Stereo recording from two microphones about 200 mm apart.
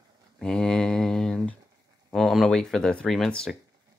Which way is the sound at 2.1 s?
Centre (ahead or behind).